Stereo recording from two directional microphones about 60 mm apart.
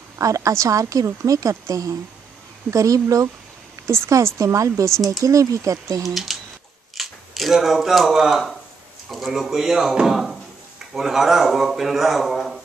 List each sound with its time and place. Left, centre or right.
0.2 s a woman's voice: right
3.8 s a woman's voice: right
6.0 s speech: centre